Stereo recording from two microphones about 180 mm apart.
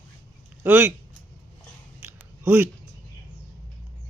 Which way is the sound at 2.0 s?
15° right (ahead or behind).